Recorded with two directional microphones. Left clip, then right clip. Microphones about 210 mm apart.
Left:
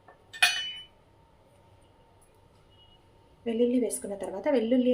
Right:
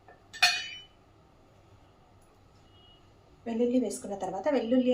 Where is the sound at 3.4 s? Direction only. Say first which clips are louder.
Left 2 dB; 30° left (ahead or behind).